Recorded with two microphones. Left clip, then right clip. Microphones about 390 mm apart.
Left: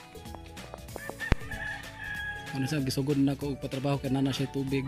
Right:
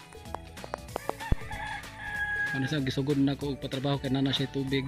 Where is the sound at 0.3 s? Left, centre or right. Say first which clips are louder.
Right 8 dB; right.